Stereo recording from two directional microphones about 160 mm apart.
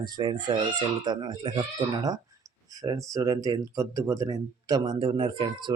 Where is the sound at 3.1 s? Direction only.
20° right (ahead or behind).